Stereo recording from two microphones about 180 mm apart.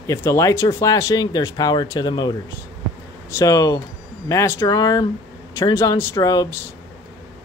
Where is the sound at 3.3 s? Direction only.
20° left (ahead or behind).